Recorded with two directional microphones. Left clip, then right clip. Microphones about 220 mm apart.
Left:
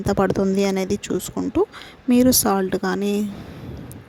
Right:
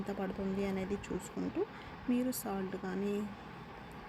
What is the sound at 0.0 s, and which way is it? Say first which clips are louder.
Speech: left 19 dB; 50° left (ahead or behind).